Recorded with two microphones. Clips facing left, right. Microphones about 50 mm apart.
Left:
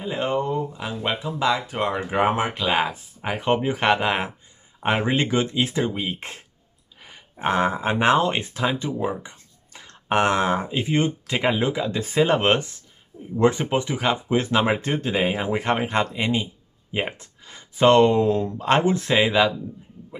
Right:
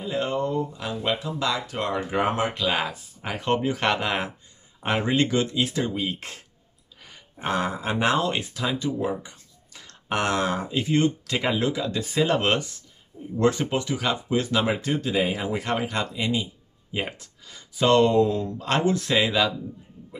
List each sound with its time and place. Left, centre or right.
0.0 s speech: left